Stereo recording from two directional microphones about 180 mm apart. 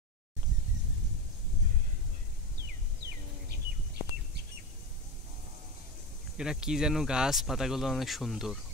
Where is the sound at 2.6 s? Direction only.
60° right (ahead or behind).